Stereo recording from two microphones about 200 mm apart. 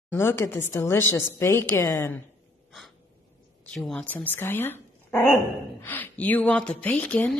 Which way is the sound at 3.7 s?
5° left (ahead or behind).